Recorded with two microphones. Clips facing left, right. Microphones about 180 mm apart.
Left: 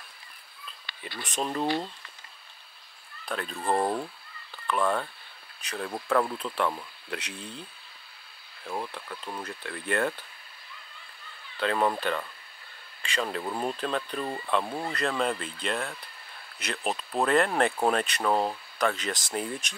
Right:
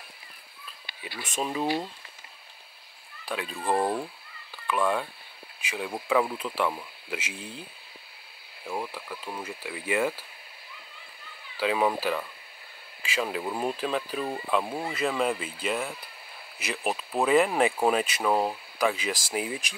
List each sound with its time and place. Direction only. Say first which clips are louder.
1.0 s speech: even; 5° right (ahead or behind)
3.3 s speech: even; 5° right (ahead or behind)
8.6 s speech: right 1 dB; 5° right (ahead or behind)
11.5 s speech: right 1 dB; 5° right (ahead or behind)